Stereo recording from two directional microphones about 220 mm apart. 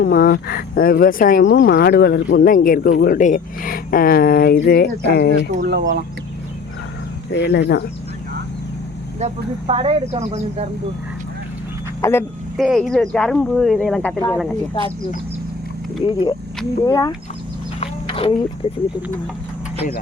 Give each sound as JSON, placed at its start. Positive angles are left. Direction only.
{"t": 0.0, "sound": "speech", "side_deg": 45}
{"t": 5.5, "sound": "speech", "side_deg": -50}
{"t": 7.3, "sound": "speech", "side_deg": 50}
{"t": 9.2, "sound": "speech", "side_deg": -30}
{"t": 12.0, "sound": "speech", "side_deg": 15}
{"t": 12.5, "sound": "speech", "side_deg": 0}
{"t": 16.0, "sound": "speech", "side_deg": 25}
{"t": 17.7, "sound": "a sound", "side_deg": 25}
{"t": 18.6, "sound": "speech", "side_deg": 25}